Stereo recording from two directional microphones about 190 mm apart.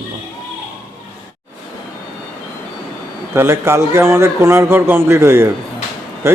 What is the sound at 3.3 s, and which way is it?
A man's voice, 15° right (ahead or behind).